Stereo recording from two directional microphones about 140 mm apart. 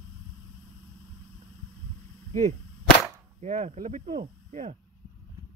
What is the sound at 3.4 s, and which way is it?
Speech, 60° right (ahead or behind).